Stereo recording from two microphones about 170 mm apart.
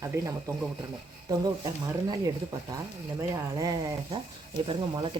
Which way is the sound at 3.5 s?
20° right (ahead or behind).